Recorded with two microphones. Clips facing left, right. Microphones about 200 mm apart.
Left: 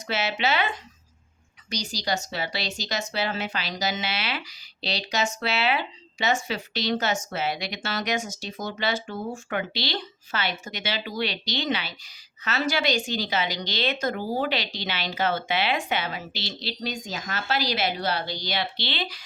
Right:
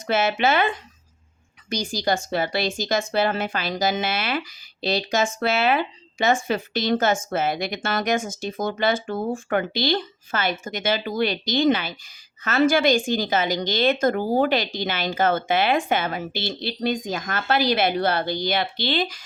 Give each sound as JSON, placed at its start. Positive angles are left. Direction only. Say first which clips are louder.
{"t": 0.1, "sound": "speech", "louder": "right 6 dB", "side_deg": -50}
{"t": 1.7, "sound": "speech", "louder": "right 5 dB", "side_deg": -50}